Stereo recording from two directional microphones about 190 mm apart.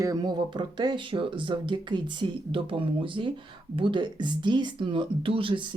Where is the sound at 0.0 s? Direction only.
20° right (ahead or behind).